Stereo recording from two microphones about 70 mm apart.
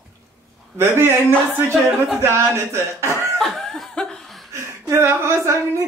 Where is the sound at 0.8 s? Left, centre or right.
Right.